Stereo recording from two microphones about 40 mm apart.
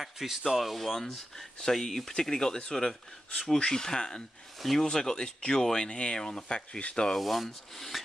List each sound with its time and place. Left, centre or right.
0.0 s speech: centre
4.6 s speech: centre
4.8 s speech: centre
7.2 s rub: centre
7.4 s speech: centre